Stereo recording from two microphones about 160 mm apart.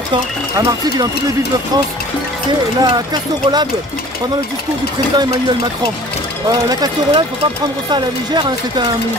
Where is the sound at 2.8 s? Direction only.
25° right (ahead or behind).